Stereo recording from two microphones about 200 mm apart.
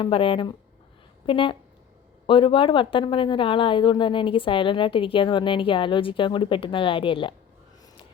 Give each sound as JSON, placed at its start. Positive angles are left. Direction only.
{"t": 0.0, "sound": "speech", "side_deg": 25}